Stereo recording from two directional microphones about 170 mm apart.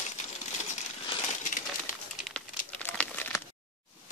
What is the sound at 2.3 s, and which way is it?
Crumpling, 10° left (ahead or behind).